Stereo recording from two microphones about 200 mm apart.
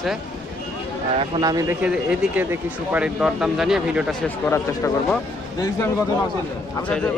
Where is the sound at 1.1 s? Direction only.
25° right (ahead or behind).